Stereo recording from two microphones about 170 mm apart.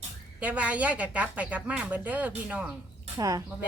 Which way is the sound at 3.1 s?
20° right (ahead or behind).